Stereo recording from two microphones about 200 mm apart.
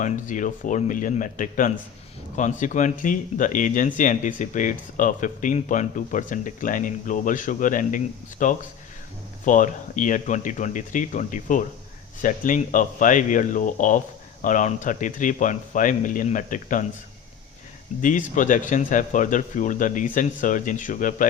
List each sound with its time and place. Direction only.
0.0 s speech: 40° left (ahead or behind)
18.0 s speech: 40° left (ahead or behind)